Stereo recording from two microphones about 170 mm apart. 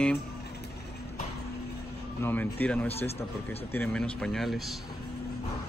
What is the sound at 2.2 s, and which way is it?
Speech, 10° left (ahead or behind).